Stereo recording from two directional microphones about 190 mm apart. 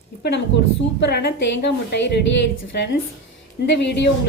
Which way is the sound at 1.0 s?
60° left (ahead or behind).